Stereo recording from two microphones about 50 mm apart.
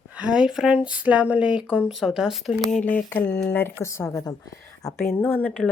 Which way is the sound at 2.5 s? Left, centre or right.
Centre.